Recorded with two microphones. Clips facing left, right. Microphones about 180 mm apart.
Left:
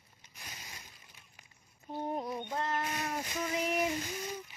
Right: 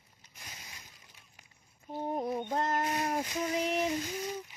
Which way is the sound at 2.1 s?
45° right (ahead or behind).